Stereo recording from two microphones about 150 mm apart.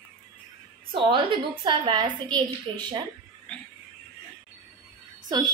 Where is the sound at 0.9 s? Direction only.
35° right (ahead or behind).